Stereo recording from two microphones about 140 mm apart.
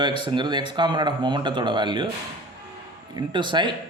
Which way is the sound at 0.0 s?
35° right (ahead or behind).